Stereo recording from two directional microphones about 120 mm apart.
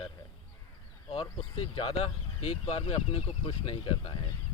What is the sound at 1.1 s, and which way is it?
Speech, 50° left (ahead or behind).